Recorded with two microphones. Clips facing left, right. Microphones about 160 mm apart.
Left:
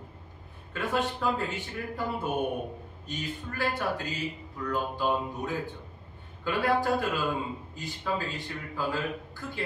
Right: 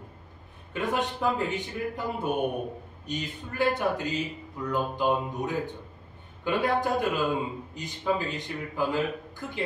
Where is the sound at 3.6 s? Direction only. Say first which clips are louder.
Right 5 dB; 20° right (ahead or behind).